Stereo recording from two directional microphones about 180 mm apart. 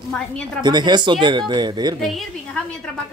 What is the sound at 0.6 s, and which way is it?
Speech, 25° right (ahead or behind).